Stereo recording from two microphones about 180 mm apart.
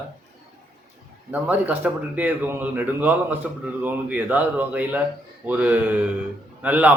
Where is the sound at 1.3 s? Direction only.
10° right (ahead or behind).